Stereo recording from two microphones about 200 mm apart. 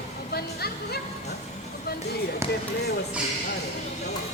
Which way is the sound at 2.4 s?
15° right (ahead or behind).